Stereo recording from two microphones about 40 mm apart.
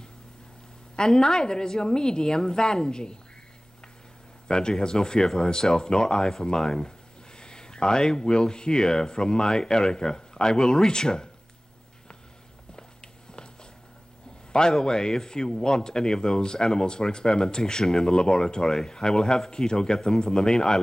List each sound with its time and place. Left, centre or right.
0.9 s speech: centre
4.5 s speech: centre
12.7 s a sound: left
14.5 s speech: centre